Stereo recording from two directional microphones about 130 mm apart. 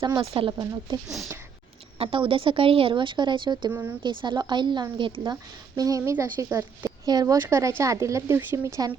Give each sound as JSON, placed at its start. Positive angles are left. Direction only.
{"t": 0.2, "sound": "speech", "side_deg": -45}
{"t": 0.5, "sound": "speech", "side_deg": -30}
{"t": 2.0, "sound": "a woman's voice", "side_deg": -45}
{"t": 3.7, "sound": "speech", "side_deg": -15}
{"t": 4.0, "sound": "a woman's voice", "side_deg": -40}